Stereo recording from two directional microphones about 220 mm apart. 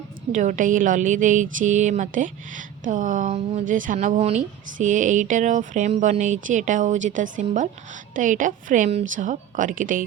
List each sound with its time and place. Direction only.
0.3 s a woman's voice: 35° right (ahead or behind)